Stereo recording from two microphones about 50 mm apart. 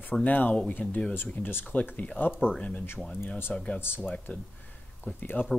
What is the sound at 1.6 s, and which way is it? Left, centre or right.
Speech, left.